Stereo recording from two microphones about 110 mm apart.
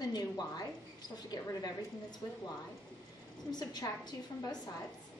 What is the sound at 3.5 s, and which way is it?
A woman's voice, 40° left (ahead or behind).